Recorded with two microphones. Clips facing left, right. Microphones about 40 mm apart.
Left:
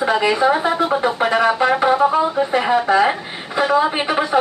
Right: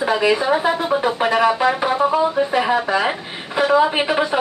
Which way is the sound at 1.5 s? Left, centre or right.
Centre.